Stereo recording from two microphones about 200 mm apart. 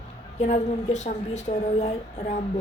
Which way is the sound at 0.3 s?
35° left (ahead or behind).